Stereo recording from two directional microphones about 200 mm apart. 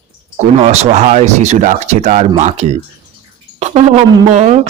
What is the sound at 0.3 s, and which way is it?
Speech, 35° right (ahead or behind).